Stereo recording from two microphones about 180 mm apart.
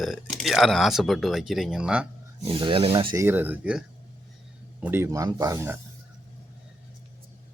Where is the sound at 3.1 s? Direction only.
15° right (ahead or behind).